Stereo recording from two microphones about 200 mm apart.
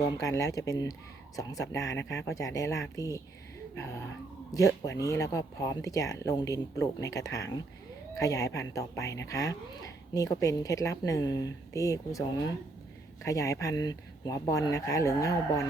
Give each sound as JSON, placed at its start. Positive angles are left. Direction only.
{"t": 0.0, "sound": "speech", "side_deg": 15}